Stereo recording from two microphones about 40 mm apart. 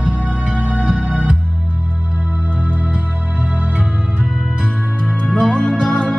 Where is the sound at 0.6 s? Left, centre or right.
Right.